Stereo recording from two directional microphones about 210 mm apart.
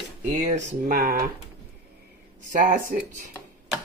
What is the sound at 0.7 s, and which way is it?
Speech, 40° right (ahead or behind).